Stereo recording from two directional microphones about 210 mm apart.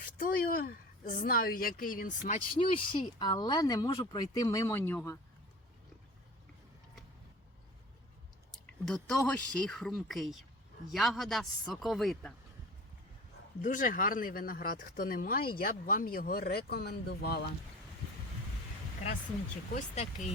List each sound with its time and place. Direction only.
0.2 s a woman's voice: 45° left (ahead or behind); by 5.1 s 10° left (ahead or behind)
8.8 s speech: centre (ahead or behind)
13.6 s speech: 40° left (ahead or behind)
19.7 s speech: 35° left (ahead or behind)